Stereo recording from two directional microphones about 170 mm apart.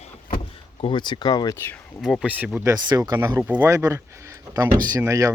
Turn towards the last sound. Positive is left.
turn(degrees=-20)  # may be behind; listen again after turning